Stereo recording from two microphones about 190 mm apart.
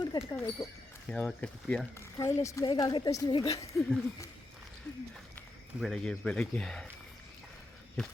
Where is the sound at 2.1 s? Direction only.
15° left (ahead or behind).